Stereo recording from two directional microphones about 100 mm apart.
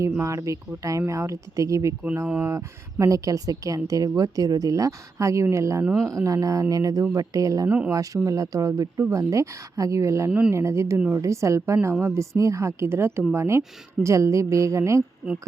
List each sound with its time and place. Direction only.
0.3 s speech: 30° right (ahead or behind)
10.2 s speech: 15° right (ahead or behind)
10.5 s a woman's voice: 30° right (ahead or behind)